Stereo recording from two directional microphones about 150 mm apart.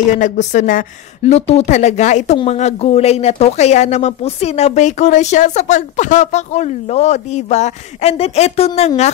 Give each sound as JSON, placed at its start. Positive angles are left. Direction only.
{"t": 0.2, "sound": "speech", "side_deg": 55}